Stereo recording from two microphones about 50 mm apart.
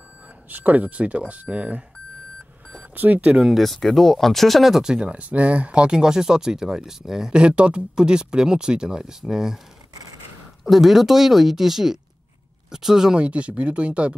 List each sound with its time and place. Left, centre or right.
0.5 s speech: right
3.0 s speech: right
3.3 s speech: centre
10.6 s speech: centre
13.2 s speech: right